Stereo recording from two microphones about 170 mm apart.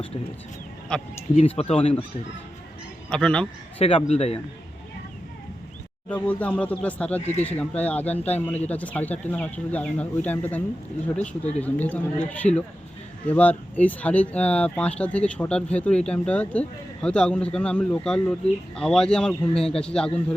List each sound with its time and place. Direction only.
0.9 s a man's voice: 5° left (ahead or behind)
1.4 s speech: 35° left (ahead or behind)
3.1 s a man's voice: 5° left (ahead or behind)
3.8 s speech: 35° left (ahead or behind)
6.1 s a man's voice: 10° left (ahead or behind)